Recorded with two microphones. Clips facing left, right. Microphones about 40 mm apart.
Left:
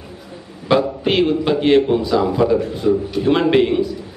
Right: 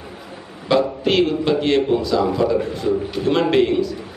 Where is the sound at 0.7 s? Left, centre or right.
Centre.